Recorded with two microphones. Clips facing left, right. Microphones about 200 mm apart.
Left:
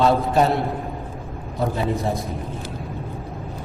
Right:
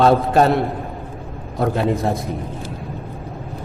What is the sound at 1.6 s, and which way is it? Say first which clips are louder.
Speech: right 4 dB; 60° right (ahead or behind).